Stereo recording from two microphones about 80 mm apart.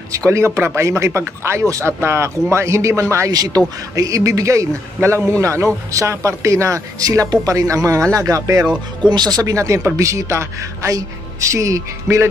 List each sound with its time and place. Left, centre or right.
0.3 s a man's voice: right
3.3 s a man's voice: right